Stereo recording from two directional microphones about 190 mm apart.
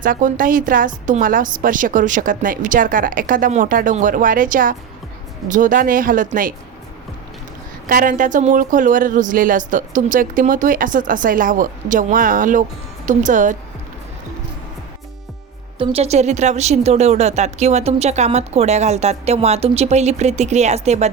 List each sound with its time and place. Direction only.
0.0 s speech: 45° right (ahead or behind)
7.9 s speech: 45° right (ahead or behind)
15.8 s speech: 30° right (ahead or behind)